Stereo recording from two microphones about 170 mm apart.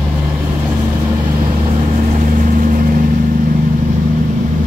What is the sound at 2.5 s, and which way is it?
Vehicle, 50° right (ahead or behind).